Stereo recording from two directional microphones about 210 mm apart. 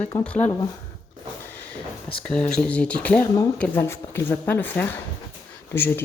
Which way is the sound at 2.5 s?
5° left (ahead or behind).